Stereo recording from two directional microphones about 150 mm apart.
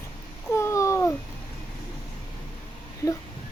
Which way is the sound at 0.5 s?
20° left (ahead or behind).